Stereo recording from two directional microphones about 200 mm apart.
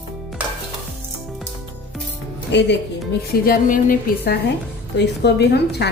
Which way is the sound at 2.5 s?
60° left (ahead or behind).